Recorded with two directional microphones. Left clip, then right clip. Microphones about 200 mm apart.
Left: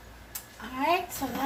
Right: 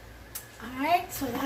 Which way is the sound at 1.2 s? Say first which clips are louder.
Right 1 dB; 45° left (ahead or behind).